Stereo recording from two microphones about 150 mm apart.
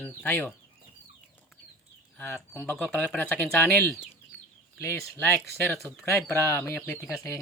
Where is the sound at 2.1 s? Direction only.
15° left (ahead or behind).